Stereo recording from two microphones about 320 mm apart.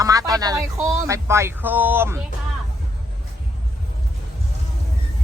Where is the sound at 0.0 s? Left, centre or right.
Centre.